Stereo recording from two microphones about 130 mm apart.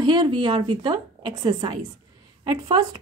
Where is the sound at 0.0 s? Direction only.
35° right (ahead or behind).